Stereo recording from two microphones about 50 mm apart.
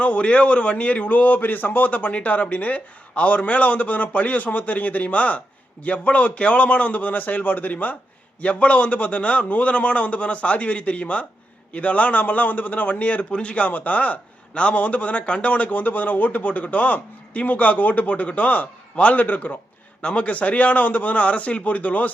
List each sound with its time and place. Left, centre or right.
0.0 s a man's voice: left
13.7 s speech: left
20.0 s a man's voice: left